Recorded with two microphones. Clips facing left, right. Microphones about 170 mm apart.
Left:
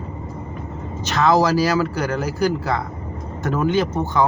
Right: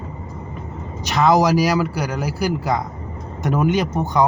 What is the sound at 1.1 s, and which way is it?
A man's voice, 15° right (ahead or behind).